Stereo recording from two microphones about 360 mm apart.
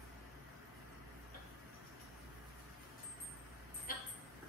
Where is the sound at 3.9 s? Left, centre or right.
Left.